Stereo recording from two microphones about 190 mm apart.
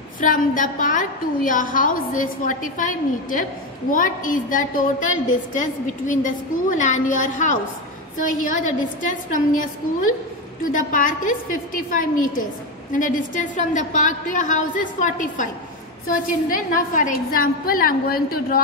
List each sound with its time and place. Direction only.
0.2 s a woman's voice: 45° left (ahead or behind)